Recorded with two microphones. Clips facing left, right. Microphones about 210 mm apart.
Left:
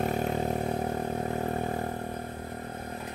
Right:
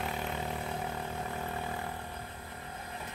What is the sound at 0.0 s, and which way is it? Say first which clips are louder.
Vehicle: left 8 dB; 45° left (ahead or behind).